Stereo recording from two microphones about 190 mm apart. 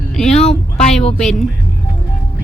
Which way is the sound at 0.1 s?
5° left (ahead or behind).